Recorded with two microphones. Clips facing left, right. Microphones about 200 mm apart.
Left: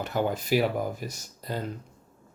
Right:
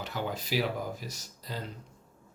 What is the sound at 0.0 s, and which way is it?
Speech, 50° left (ahead or behind).